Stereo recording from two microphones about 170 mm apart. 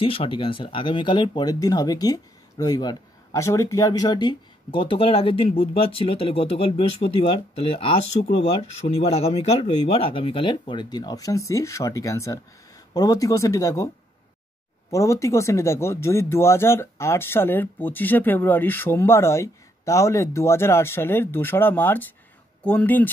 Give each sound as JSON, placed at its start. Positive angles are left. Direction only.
{"t": 0.0, "sound": "speech", "side_deg": 30}
{"t": 14.9, "sound": "speech", "side_deg": 20}